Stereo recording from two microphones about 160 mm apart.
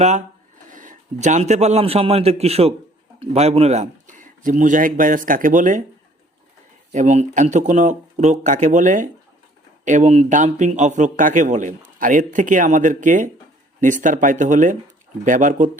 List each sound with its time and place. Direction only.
0.7 s a man's voice: 55° right (ahead or behind)
6.9 s a man's voice: 50° right (ahead or behind)